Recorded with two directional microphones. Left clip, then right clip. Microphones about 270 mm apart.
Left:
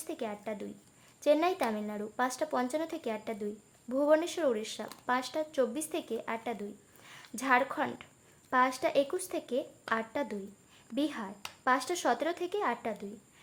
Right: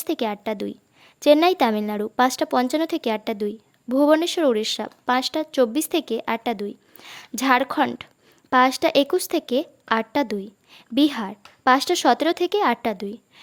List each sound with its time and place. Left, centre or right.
0.0 s a woman's voice: right